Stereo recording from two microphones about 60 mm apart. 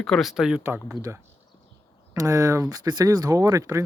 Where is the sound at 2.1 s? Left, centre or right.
Right.